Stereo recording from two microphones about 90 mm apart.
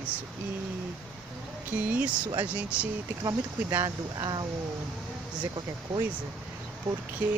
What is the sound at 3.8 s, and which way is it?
Speech, 45° right (ahead or behind).